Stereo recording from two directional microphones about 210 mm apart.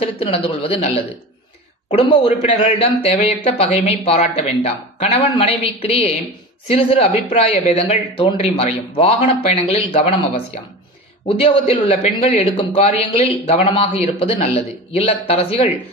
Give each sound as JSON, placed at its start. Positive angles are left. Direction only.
{"t": 0.0, "sound": "speech", "side_deg": 25}